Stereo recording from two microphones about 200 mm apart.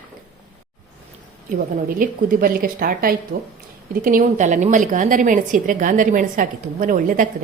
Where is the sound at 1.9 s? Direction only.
45° right (ahead or behind).